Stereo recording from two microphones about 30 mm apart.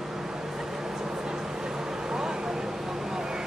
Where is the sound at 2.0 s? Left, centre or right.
Right.